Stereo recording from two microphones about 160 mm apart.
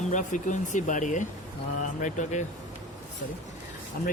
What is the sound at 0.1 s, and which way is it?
Speech, 50° left (ahead or behind).